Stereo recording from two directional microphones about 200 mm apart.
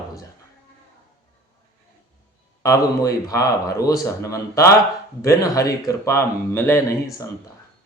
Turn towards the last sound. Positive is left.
turn(degrees=15)  # may be behind; listen again after turning